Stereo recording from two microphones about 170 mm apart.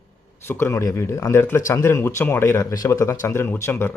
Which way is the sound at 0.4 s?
15° left (ahead or behind).